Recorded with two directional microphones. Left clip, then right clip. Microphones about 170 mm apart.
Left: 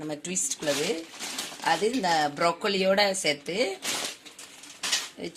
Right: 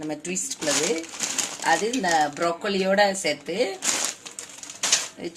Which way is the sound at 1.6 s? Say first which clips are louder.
Right 2 dB; 40° left (ahead or behind).